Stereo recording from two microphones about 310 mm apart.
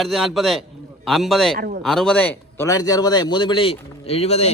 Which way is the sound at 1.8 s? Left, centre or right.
Centre.